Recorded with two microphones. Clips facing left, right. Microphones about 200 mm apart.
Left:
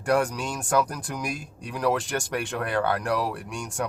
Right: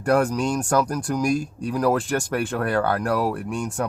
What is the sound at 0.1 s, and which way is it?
Speech, 45° right (ahead or behind).